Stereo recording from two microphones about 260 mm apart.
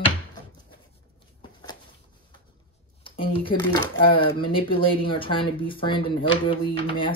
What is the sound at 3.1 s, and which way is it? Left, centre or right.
Speech, centre.